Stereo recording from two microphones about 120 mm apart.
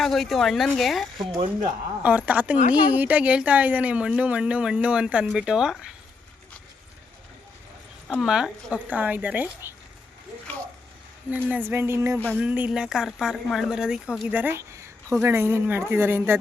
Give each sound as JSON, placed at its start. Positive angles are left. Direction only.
{"t": 0.0, "sound": "speech", "side_deg": 0}
{"t": 2.0, "sound": "speech", "side_deg": -15}
{"t": 8.1, "sound": "speech", "side_deg": -5}
{"t": 11.3, "sound": "speech", "side_deg": -15}
{"t": 12.4, "sound": "speech", "side_deg": -10}